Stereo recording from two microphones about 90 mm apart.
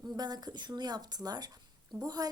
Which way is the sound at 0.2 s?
50° right (ahead or behind).